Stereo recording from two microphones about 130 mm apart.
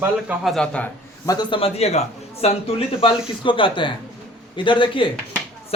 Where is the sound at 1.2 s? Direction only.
25° left (ahead or behind).